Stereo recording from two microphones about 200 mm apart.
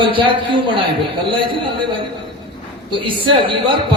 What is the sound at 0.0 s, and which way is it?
A man's voice, 25° right (ahead or behind).